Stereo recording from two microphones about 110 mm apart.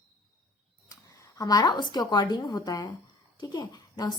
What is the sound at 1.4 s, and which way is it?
A woman's voice, 35° left (ahead or behind).